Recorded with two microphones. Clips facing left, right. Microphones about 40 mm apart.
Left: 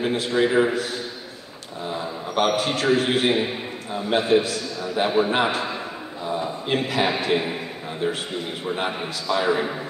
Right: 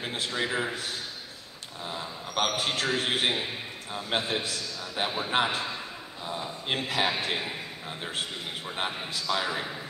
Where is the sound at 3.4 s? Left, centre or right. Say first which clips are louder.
Left 7 dB; centre.